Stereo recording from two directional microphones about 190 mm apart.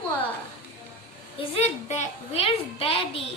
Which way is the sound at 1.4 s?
35° left (ahead or behind).